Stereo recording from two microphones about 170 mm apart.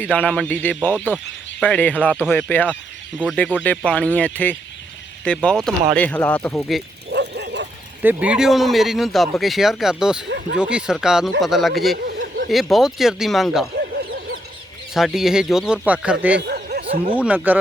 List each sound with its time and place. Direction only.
0.0 s speech: 10° left (ahead or behind)
7.1 s bow-wow: 85° right
8.0 s speech: 5° right (ahead or behind)
10.2 s speech: 90° right
10.6 s speech: 5° right (ahead or behind)
12.0 s a sound: 90° right
12.5 s speech: centre (ahead or behind)
14.9 s speech: centre (ahead or behind)
16.4 s a sound: 70° right (ahead or behind)
17.2 s speech: 10° right (ahead or behind)